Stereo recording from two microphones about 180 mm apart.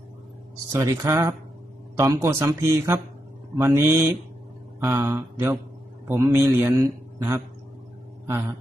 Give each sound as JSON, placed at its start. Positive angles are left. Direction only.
{"t": 0.7, "sound": "a man's voice", "side_deg": -15}